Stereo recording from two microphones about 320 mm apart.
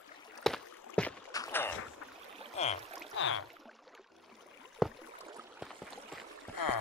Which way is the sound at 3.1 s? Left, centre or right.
Left.